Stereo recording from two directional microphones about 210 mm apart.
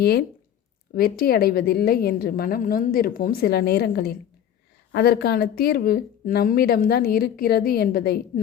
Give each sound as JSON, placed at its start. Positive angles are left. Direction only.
{"t": 0.0, "sound": "speech", "side_deg": 50}